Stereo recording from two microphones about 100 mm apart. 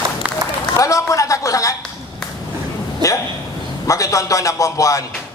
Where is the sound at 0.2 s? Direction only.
15° right (ahead or behind).